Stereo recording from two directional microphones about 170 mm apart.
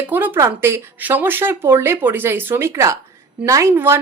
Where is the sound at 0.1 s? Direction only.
10° right (ahead or behind).